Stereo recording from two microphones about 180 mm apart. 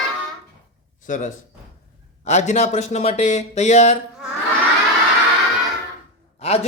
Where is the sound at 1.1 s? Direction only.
45° left (ahead or behind).